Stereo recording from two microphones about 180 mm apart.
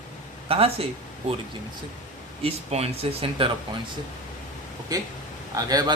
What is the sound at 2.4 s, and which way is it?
A man's voice, 35° right (ahead or behind).